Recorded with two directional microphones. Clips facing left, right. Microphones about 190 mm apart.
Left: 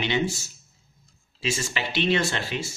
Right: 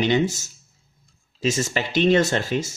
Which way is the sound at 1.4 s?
45° right (ahead or behind).